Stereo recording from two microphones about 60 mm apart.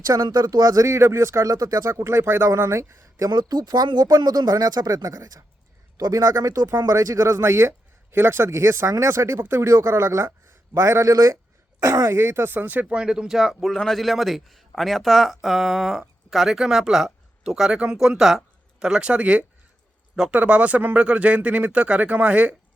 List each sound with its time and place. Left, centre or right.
0.0 s speech: right
0.9 s speech: right
6.0 s a man's voice: right
6.7 s speech: right
12.5 s speech: right